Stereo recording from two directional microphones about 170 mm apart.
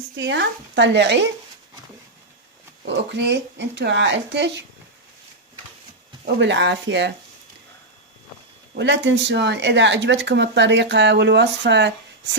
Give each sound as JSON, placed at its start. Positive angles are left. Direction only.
{"t": 0.2, "sound": "speech", "side_deg": -90}
{"t": 2.8, "sound": "speech", "side_deg": -85}
{"t": 6.2, "sound": "speech", "side_deg": -90}
{"t": 8.7, "sound": "speech", "side_deg": -90}